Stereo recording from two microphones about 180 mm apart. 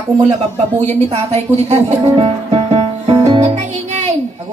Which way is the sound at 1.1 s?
35° right (ahead or behind).